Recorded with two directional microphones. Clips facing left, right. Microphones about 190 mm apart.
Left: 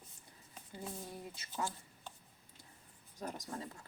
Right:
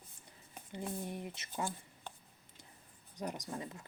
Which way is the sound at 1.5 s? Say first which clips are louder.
Even; 50° right (ahead or behind).